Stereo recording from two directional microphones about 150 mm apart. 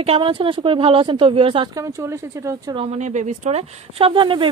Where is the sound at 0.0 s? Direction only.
35° right (ahead or behind).